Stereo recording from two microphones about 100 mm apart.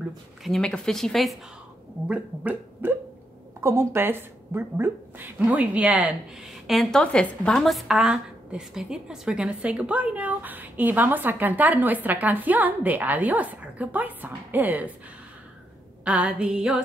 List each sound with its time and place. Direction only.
0.4 s speech: 5° left (ahead or behind)
2.0 s a woman's voice: 15° right (ahead or behind)
3.6 s a woman's voice: 25° right (ahead or behind)
6.7 s a woman's voice: 5° left (ahead or behind); by 14.9 s 15° right (ahead or behind)
16.0 s a woman's voice: 10° right (ahead or behind)